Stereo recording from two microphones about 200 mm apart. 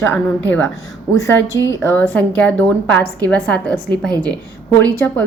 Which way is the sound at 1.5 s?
65° left (ahead or behind).